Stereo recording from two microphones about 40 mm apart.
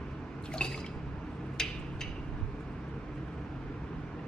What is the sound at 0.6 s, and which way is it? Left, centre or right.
Drip, left.